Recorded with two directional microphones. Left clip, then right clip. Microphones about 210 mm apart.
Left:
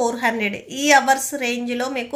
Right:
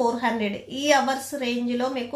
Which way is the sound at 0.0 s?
35° left (ahead or behind).